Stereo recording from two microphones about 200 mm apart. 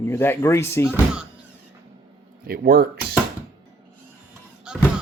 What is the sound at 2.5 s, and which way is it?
Speech, 50° right (ahead or behind).